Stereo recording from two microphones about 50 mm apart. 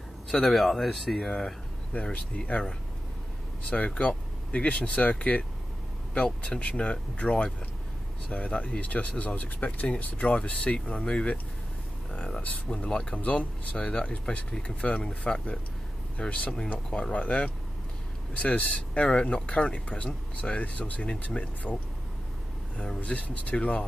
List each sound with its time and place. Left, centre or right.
0.3 s speech: centre
2.1 s speech: left
3.7 s speech: left
6.1 s speech: left
21.7 s speech: centre
22.9 s speech: left